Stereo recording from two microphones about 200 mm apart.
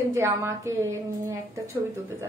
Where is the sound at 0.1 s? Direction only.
15° right (ahead or behind).